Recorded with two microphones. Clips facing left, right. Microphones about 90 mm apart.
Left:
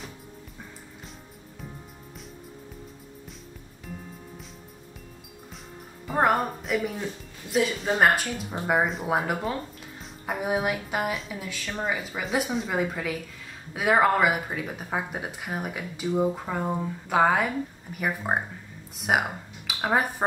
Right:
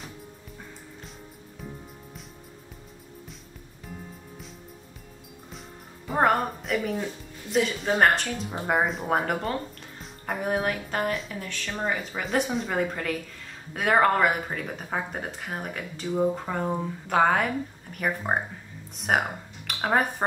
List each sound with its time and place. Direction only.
6.0 s speech: centre (ahead or behind)